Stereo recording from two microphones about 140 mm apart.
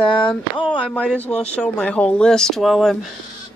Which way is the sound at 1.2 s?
5° left (ahead or behind).